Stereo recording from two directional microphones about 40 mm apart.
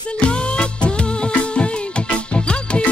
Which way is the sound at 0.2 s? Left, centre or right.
Left.